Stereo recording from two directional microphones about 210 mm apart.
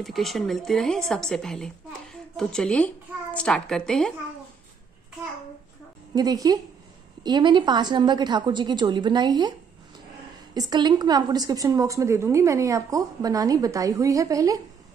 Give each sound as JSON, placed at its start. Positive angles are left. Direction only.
{"t": 0.0, "sound": "a woman's voice", "side_deg": 0}
{"t": 6.1, "sound": "a woman's voice", "side_deg": -15}